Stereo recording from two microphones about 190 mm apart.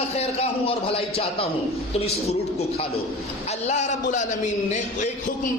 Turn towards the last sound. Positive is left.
turn(degrees=40)  # may be behind; listen again after turning